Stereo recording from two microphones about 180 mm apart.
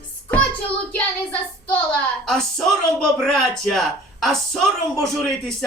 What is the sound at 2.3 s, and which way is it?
Speech, centre (ahead or behind).